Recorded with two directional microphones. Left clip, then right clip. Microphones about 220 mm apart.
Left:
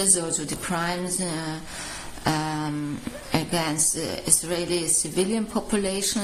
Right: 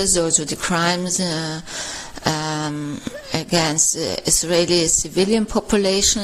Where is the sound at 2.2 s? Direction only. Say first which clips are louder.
Right 4 dB; 35° right (ahead or behind).